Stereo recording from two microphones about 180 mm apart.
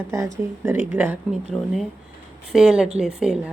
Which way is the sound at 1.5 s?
10° left (ahead or behind).